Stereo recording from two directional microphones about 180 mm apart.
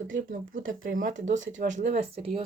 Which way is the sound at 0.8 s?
50° right (ahead or behind).